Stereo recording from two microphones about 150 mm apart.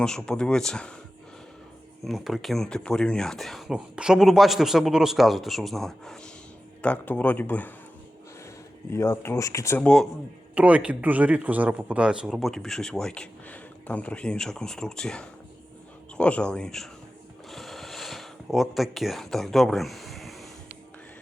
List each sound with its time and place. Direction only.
0.0 s speech: 5° left (ahead or behind)
2.0 s speech: centre (ahead or behind)
8.9 s speech: 20° left (ahead or behind)
9.8 s speech: 5° left (ahead or behind)
10.5 s speech: 10° right (ahead or behind)
17.5 s a sound: centre (ahead or behind)